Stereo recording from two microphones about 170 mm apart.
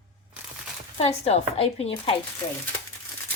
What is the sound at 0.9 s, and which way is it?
Speech, 40° left (ahead or behind).